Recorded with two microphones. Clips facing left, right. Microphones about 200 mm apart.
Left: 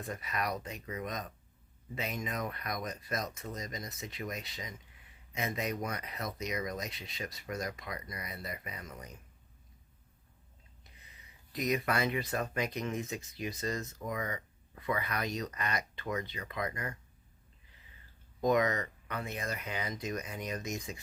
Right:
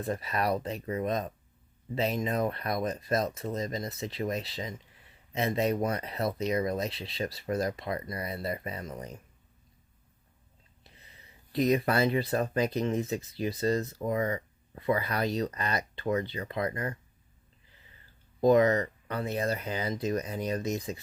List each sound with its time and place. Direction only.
0.0 s speech: 35° right (ahead or behind)
10.8 s speech: 35° right (ahead or behind)
18.3 s speech: 35° right (ahead or behind)